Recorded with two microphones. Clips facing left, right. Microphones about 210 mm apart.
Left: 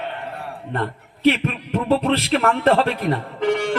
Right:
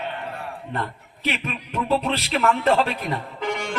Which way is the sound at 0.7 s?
55° left (ahead or behind).